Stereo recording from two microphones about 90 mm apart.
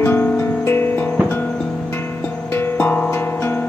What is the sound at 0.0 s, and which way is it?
Music, 25° left (ahead or behind).